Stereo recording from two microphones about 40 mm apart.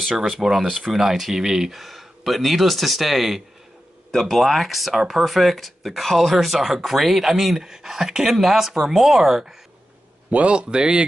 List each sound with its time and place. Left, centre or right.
0.1 s speech: centre
10.3 s speech: right